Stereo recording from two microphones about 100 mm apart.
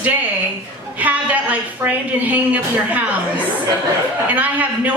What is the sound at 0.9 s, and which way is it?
A woman's voice, 15° right (ahead or behind).